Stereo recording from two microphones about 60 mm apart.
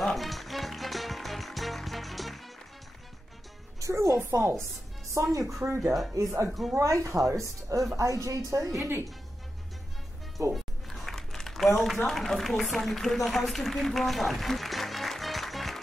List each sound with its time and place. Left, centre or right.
0.0 s music: centre
3.8 s a woman's voice: right
5.1 s speech: right
6.1 s speech: right
6.8 s speech: right
10.5 s a sound: centre
12.1 s speech: centre